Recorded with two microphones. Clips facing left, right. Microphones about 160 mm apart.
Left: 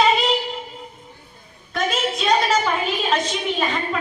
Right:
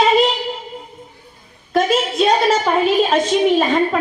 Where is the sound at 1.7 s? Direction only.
45° right (ahead or behind).